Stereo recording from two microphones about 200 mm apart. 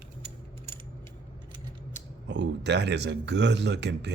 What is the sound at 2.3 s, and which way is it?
Speech, 60° right (ahead or behind).